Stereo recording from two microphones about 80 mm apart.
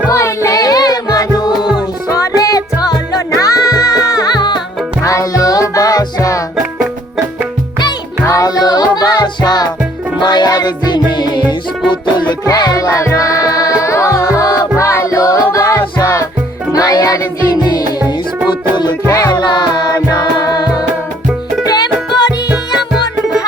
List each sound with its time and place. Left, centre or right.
0.1 s music: left
5.0 s music: left
8.2 s music: left
12.5 s music: left
18.0 s music: right
19.0 s music: left
19.3 s music: left
22.8 s music: centre